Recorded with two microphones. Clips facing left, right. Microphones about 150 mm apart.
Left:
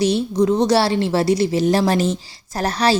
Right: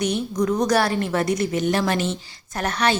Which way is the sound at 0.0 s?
30° left (ahead or behind).